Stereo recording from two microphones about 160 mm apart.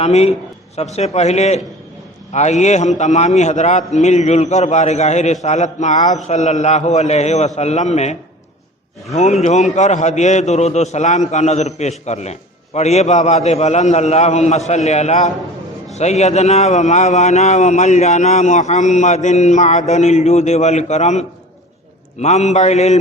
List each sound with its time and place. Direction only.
0.0 s a man's voice: 40° left (ahead or behind)
9.1 s a man's voice: 45° left (ahead or behind)